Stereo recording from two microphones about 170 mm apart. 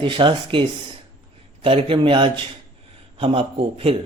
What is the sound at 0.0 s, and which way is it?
Speech, 30° right (ahead or behind).